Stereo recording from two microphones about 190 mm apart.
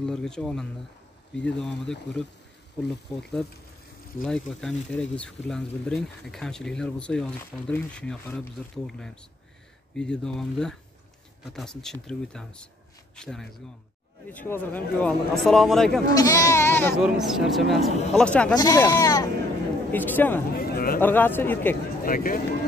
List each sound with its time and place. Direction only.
0.0 s speech: 5° left (ahead or behind)
16.2 s speech: 15° left (ahead or behind)
17.0 s speech: centre (ahead or behind)
18.5 s speech: 20° left (ahead or behind)
20.5 s a sound: 50° left (ahead or behind)
21.0 s speech: 10° left (ahead or behind)
22.0 s speech: 50° left (ahead or behind)